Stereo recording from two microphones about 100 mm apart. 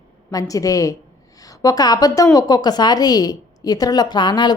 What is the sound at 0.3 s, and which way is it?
A woman's voice, 35° left (ahead or behind).